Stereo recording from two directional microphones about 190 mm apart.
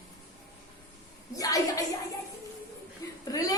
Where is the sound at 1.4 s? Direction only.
20° left (ahead or behind).